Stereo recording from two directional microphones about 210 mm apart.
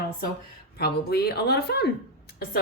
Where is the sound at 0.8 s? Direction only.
50° left (ahead or behind).